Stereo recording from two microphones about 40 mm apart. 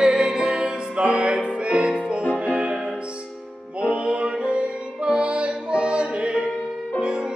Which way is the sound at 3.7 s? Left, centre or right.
Right.